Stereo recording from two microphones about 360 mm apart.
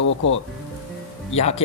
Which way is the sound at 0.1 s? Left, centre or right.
Left.